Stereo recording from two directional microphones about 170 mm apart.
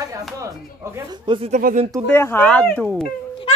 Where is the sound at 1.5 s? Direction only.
55° right (ahead or behind).